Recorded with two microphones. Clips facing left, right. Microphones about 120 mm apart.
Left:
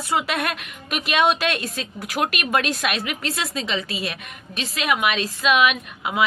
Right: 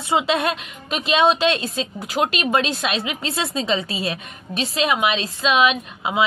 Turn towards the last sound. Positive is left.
turn(degrees=-30)  # may be behind; listen again after turning